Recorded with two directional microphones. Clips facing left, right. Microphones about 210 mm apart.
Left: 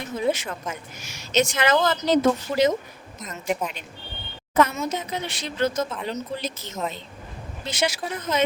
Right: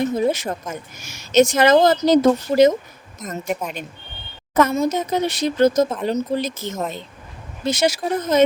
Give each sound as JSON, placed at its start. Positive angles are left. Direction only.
{"t": 0.2, "sound": "a woman's voice", "side_deg": -40}
{"t": 4.7, "sound": "a woman's voice", "side_deg": -35}